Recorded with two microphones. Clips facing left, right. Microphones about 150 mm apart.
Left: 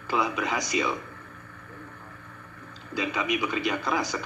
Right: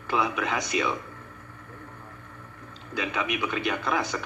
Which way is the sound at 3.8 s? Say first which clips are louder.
Even; 20° right (ahead or behind).